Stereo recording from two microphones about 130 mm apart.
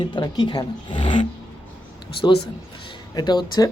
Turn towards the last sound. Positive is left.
turn(degrees=35)  # may be behind; listen again after turning